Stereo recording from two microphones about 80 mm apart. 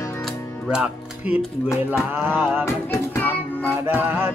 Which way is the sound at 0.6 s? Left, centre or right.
Centre.